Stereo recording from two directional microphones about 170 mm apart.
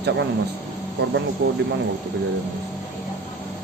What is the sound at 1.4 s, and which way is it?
Speech, 90° right.